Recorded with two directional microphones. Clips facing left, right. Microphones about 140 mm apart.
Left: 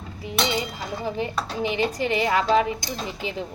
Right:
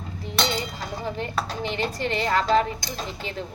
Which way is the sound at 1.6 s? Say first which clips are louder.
Left 6 dB; 10° left (ahead or behind).